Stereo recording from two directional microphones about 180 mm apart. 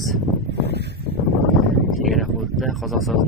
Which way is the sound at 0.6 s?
65° right (ahead or behind).